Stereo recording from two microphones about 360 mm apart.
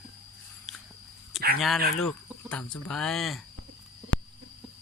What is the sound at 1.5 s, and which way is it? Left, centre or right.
Speech, centre.